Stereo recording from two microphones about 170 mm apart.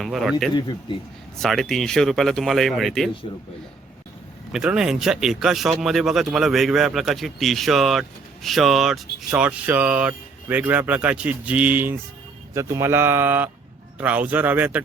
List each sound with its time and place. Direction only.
0.0 s speech: centre (ahead or behind)
4.5 s speech: 5° right (ahead or behind)